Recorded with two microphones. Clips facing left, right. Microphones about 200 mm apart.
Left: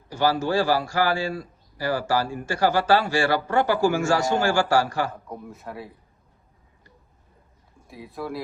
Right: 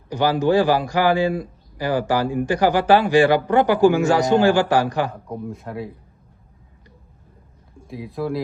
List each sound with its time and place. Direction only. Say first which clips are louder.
0.1 s a man's voice: right 5 dB; 15° right (ahead or behind)
5.5 s speech: right 7 dB; centre (ahead or behind)
7.9 s speech: right 7 dB; centre (ahead or behind)